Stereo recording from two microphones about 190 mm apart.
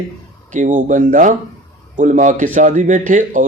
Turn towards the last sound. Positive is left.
turn(degrees=-40)  # may be behind; listen again after turning